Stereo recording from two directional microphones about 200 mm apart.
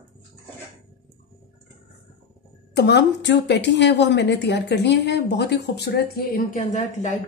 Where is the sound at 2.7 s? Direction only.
55° left (ahead or behind).